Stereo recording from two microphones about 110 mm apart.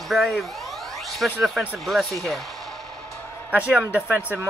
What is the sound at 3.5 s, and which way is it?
Speech, 10° right (ahead or behind).